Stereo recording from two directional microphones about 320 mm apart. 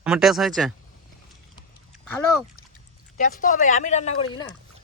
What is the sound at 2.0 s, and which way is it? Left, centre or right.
Speech, centre.